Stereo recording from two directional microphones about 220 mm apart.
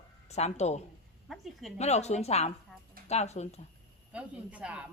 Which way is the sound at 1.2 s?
Centre (ahead or behind).